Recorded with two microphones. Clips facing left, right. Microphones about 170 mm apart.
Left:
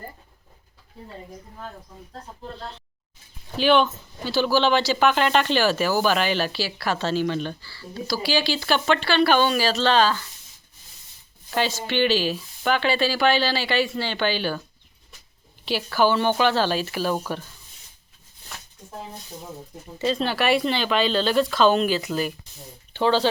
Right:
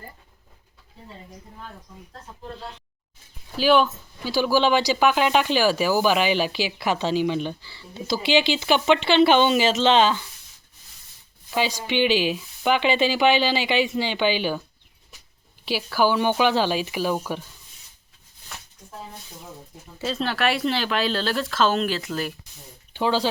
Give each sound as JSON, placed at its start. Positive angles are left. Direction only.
{"t": 3.6, "sound": "speech", "side_deg": -5}
{"t": 11.5, "sound": "speech", "side_deg": -10}
{"t": 15.6, "sound": "speech", "side_deg": -10}
{"t": 20.0, "sound": "speech", "side_deg": 0}